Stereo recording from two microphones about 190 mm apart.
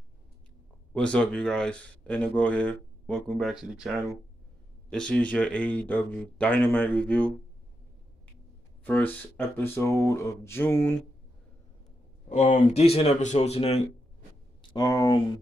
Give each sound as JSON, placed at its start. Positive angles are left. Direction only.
{"t": 0.9, "sound": "speech", "side_deg": 5}
{"t": 8.8, "sound": "speech", "side_deg": 10}
{"t": 12.3, "sound": "speech", "side_deg": 40}
{"t": 14.6, "sound": "speech", "side_deg": 20}